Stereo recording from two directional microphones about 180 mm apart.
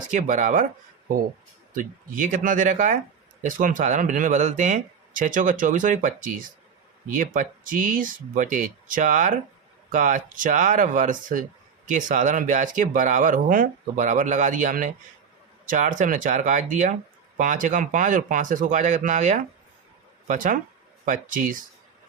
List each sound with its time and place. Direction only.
0.1 s speech: 45° right (ahead or behind)